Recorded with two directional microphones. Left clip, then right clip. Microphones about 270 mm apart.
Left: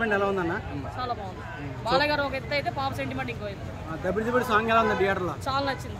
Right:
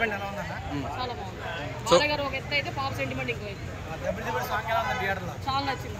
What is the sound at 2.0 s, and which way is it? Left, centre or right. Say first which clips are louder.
Speech: left 2 dB; centre.